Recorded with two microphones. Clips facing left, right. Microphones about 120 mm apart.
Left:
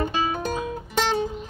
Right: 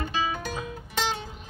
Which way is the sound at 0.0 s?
45° left (ahead or behind).